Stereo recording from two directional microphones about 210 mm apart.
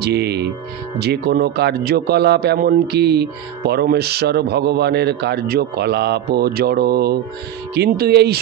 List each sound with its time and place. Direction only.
0.0 s a man's voice: 50° right (ahead or behind)